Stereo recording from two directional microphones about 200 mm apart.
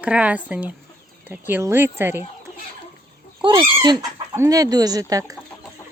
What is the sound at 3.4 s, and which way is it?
Speech, 25° right (ahead or behind).